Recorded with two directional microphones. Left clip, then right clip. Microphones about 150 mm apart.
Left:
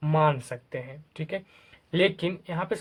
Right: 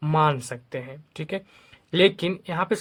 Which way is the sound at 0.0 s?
35° right (ahead or behind).